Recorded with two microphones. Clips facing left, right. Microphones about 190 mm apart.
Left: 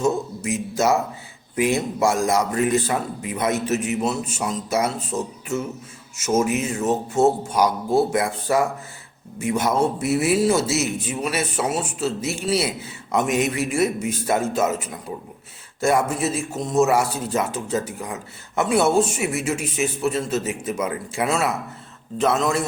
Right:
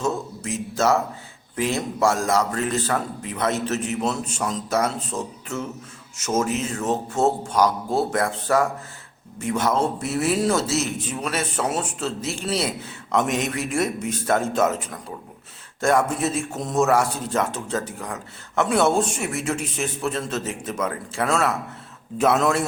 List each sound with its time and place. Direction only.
0.0 s a man's voice: 10° left (ahead or behind)
22.2 s a man's voice: 5° right (ahead or behind)